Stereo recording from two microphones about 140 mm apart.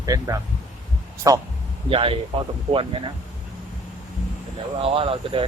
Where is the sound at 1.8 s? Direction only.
40° right (ahead or behind).